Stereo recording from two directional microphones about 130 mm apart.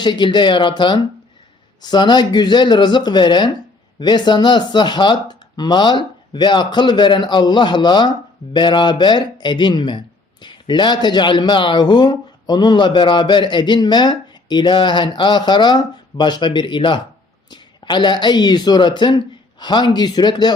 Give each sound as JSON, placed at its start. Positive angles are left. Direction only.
{"t": 0.0, "sound": "a man's voice", "side_deg": 35}